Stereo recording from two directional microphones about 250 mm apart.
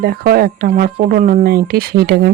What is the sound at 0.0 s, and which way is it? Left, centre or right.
Speech, right.